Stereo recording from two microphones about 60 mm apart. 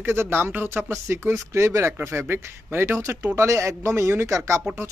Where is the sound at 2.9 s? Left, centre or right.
Right.